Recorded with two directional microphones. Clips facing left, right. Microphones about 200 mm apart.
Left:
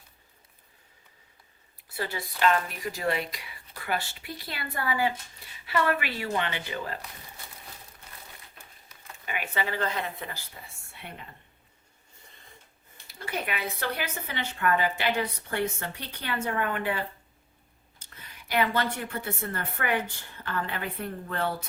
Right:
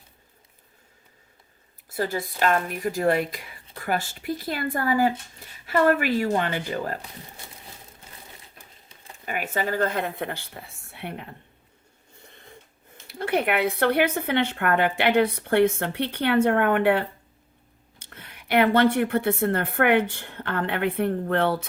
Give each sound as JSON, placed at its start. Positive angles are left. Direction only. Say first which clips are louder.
{"t": 1.9, "sound": "speech", "louder": "right 7 dB", "side_deg": -45}
{"t": 8.5, "sound": "crumpling", "louder": "right 2 dB", "side_deg": -30}
{"t": 9.2, "sound": "speech", "louder": "right 4 dB", "side_deg": -45}
{"t": 13.1, "sound": "speech", "louder": "right 10 dB", "side_deg": -60}